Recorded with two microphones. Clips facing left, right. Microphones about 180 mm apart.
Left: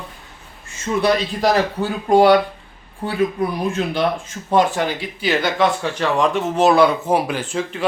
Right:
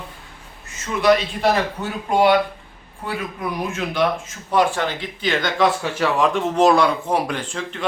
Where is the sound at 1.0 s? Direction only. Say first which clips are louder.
Right 1 dB; 35° left (ahead or behind).